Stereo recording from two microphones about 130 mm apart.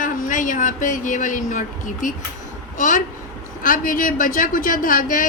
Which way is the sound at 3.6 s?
90° left.